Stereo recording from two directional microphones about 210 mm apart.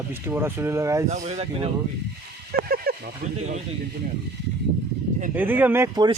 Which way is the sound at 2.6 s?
45° right (ahead or behind).